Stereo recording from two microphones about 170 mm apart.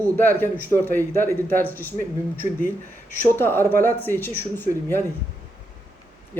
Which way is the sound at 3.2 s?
10° left (ahead or behind).